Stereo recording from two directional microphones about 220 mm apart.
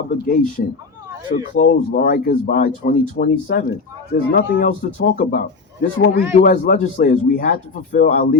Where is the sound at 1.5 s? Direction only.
40° left (ahead or behind).